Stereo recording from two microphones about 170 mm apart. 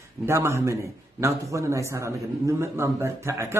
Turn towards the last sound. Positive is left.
turn(degrees=-15)  # may be behind; listen again after turning